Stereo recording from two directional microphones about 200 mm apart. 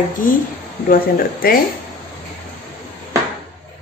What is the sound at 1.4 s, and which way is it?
Speech, 45° left (ahead or behind).